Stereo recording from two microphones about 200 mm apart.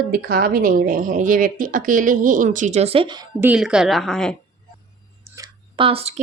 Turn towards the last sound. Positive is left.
turn(degrees=-30)  # may be behind; listen again after turning